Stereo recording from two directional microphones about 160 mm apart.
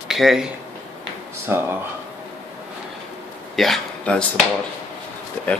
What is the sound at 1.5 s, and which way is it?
Speech, 15° right (ahead or behind).